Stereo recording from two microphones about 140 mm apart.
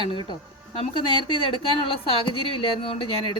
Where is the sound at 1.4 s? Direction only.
40° left (ahead or behind).